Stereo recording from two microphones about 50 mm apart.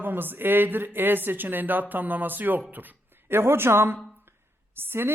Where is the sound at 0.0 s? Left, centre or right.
Right.